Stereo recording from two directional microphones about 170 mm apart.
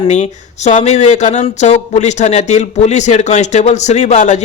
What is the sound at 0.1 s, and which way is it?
A man's voice, 40° left (ahead or behind).